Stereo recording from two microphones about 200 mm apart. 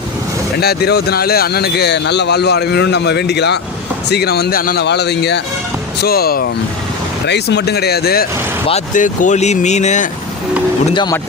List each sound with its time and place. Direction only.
0.6 s speech: 50° left (ahead or behind)
8.6 s speech: 35° left (ahead or behind)
10.9 s speech: 20° left (ahead or behind)